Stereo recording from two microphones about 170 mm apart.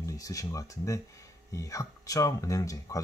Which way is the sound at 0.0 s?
20° left (ahead or behind).